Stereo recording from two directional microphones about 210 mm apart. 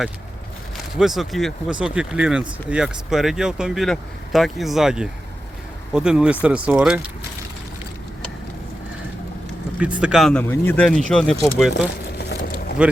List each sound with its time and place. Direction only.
0.9 s speech: centre (ahead or behind)
9.7 s speech: 5° right (ahead or behind)
11.7 s a sound: 50° left (ahead or behind)